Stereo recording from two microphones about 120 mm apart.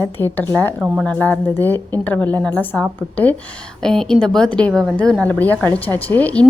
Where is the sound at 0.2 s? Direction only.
15° left (ahead or behind).